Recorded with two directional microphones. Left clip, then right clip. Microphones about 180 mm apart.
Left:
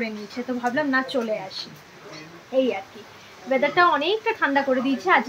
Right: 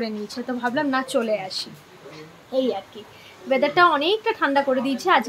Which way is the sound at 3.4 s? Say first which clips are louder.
Right 1 dB; 20° right (ahead or behind).